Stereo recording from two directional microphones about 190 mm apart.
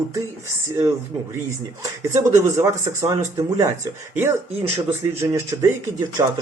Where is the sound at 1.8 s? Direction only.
15° right (ahead or behind).